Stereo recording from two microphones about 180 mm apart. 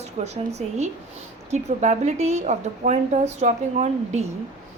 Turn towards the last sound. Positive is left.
turn(degrees=-40)  # may be behind; listen again after turning